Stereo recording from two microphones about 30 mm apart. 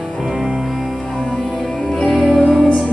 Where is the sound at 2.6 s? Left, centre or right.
Right.